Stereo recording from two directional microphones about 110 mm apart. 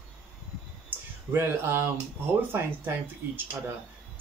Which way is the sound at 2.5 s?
20° right (ahead or behind).